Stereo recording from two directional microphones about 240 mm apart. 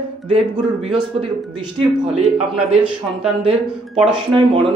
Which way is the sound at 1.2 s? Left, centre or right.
Right.